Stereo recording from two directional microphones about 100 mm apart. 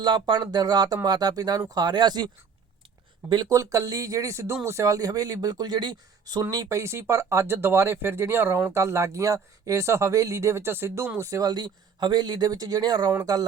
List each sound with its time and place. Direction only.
0.0 s speech: 45° right (ahead or behind)
6.4 s speech: 35° right (ahead or behind)